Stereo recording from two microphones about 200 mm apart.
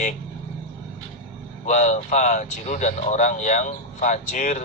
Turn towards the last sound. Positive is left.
turn(degrees=35)  # may be behind; listen again after turning